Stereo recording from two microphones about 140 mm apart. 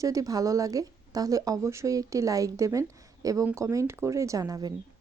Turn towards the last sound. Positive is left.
turn(degrees=-25)  # may be behind; listen again after turning